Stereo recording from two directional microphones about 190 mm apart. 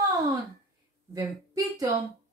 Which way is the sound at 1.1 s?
20° right (ahead or behind).